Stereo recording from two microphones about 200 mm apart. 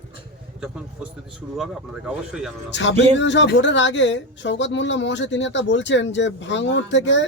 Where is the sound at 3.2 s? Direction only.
65° left (ahead or behind).